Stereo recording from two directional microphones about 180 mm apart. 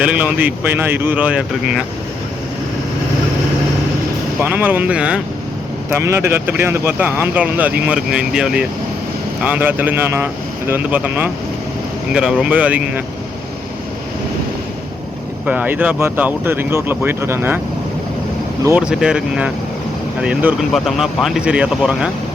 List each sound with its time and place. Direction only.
0.0 s speech: 10° right (ahead or behind)
4.4 s speech: 10° right (ahead or behind)
15.4 s speech: 10° right (ahead or behind)
18.8 s speech: 5° right (ahead or behind)